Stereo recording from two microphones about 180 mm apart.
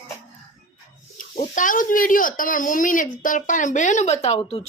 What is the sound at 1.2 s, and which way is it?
Speech, 45° left (ahead or behind).